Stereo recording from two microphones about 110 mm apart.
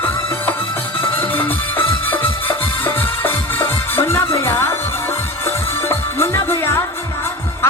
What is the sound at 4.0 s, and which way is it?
Music, 25° left (ahead or behind).